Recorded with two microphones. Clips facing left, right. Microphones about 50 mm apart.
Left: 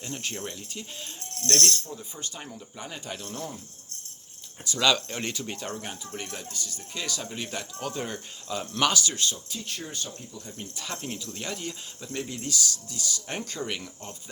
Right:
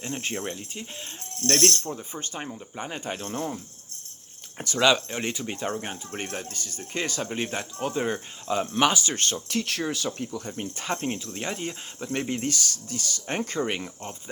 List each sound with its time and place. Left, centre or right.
0.0 s speech: right
1.6 s speech: right
2.0 s speech: right
4.5 s speech: right
4.8 s speech: centre
6.1 s speech: right
9.1 s speech: right
9.6 s speech: right
10.8 s speech: right
12.0 s speech: right